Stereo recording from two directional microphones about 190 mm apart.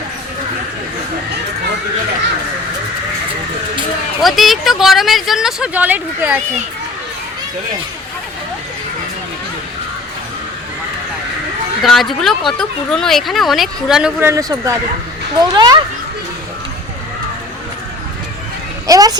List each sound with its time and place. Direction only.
4.2 s speech: centre (ahead or behind)
11.8 s speech: centre (ahead or behind); by 15.8 s 20° right (ahead or behind)
18.9 s speech: 20° right (ahead or behind)